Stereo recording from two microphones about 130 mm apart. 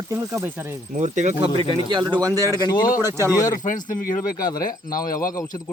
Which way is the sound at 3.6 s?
90° left.